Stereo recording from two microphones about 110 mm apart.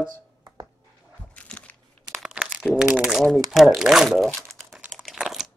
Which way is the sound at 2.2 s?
5° right (ahead or behind).